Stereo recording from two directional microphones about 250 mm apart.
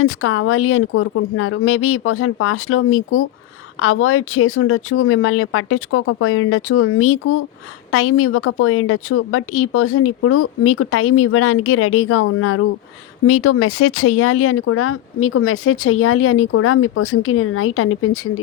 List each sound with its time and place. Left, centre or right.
0.0 s speech: left